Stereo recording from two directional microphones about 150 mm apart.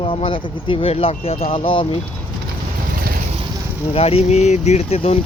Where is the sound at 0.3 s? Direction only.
35° left (ahead or behind).